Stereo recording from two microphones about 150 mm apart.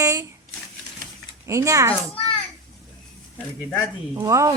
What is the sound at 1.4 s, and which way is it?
Speech, 20° right (ahead or behind).